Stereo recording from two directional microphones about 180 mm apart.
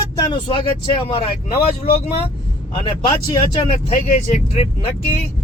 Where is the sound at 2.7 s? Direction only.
30° left (ahead or behind).